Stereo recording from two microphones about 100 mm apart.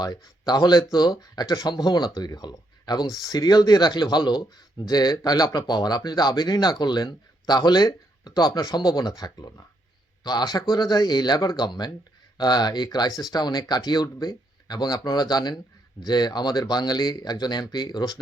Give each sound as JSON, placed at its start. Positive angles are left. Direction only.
{"t": 0.0, "sound": "a man's voice", "side_deg": 45}